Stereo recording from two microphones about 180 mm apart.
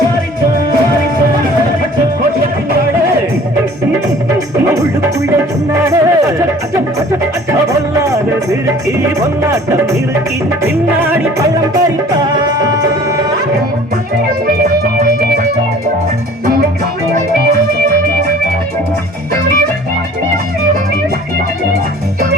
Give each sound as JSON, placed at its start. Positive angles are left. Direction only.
{"t": 4.5, "sound": "music", "side_deg": -15}
{"t": 5.7, "sound": "speech", "side_deg": -15}
{"t": 7.7, "sound": "music", "side_deg": -15}
{"t": 11.0, "sound": "music", "side_deg": -15}
{"t": 15.0, "sound": "music", "side_deg": -55}